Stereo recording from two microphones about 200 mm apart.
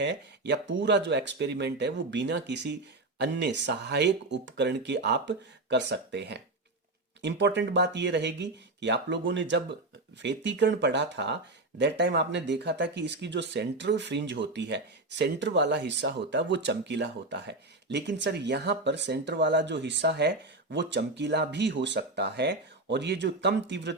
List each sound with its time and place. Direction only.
0.0 s speech: 60° right (ahead or behind)